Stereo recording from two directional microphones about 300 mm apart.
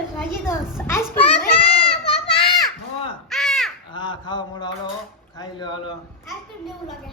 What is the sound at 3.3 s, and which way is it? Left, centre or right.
Crow, centre.